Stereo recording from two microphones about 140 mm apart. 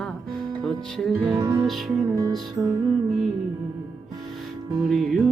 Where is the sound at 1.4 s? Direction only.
25° right (ahead or behind).